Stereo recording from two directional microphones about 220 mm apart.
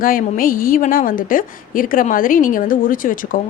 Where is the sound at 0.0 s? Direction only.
40° left (ahead or behind).